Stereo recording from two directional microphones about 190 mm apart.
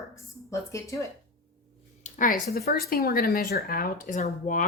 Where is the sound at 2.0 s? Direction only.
45° left (ahead or behind).